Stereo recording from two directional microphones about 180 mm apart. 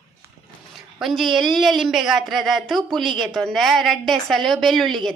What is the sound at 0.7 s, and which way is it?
A woman's voice, centre (ahead or behind).